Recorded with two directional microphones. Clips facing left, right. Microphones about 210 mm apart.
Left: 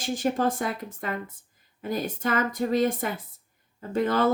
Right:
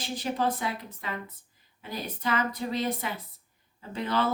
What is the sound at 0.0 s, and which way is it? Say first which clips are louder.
Speech: left 4 dB; 45° left (ahead or behind).